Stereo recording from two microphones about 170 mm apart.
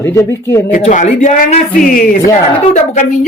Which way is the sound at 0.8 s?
45° left (ahead or behind).